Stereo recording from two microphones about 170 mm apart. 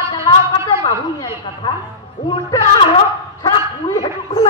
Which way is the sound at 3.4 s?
20° left (ahead or behind).